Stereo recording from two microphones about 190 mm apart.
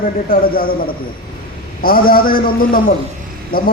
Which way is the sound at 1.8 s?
50° left (ahead or behind).